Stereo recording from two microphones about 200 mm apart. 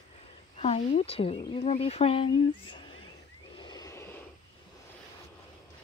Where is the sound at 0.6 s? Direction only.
30° left (ahead or behind).